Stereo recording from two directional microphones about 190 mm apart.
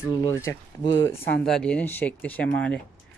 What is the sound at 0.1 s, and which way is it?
Speech, 20° left (ahead or behind).